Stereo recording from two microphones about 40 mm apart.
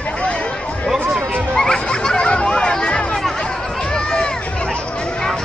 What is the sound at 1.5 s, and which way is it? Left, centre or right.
Music, left.